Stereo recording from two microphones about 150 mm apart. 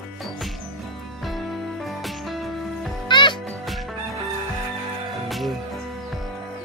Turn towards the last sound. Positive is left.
turn(degrees=0)  # may be behind; listen again after turning